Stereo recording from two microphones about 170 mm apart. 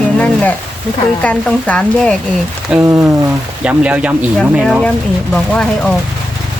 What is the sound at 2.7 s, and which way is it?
Speech, 5° right (ahead or behind).